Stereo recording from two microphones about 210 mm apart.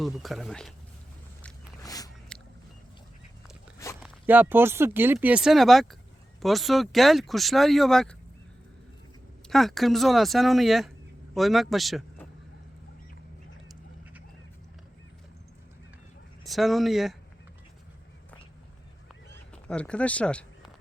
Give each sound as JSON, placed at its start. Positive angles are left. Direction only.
{"t": 0.0, "sound": "speech", "side_deg": 0}
{"t": 1.8, "sound": "a sound", "side_deg": 15}
{"t": 2.3, "sound": "vehicle", "side_deg": 5}
{"t": 4.0, "sound": "speech", "side_deg": -10}
{"t": 9.5, "sound": "speech", "side_deg": 0}
{"t": 16.4, "sound": "speech", "side_deg": 0}
{"t": 19.3, "sound": "a sound", "side_deg": 5}